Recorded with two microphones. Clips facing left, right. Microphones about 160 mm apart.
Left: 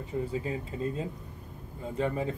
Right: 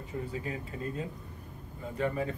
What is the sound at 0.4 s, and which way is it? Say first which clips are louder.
Speech: left 4 dB; 25° left (ahead or behind).